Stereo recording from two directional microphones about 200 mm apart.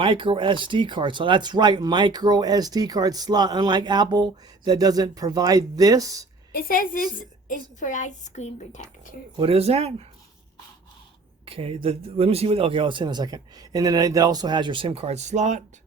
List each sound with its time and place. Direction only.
0.0 s speech: 25° right (ahead or behind)
6.5 s a woman's voice: 45° left (ahead or behind)
9.4 s speech: 30° right (ahead or behind)
11.4 s speech: 30° right (ahead or behind)